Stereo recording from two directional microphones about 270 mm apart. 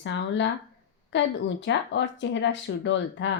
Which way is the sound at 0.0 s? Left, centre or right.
Left.